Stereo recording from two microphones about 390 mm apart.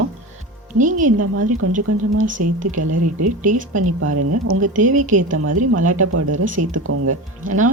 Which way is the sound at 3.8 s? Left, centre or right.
Right.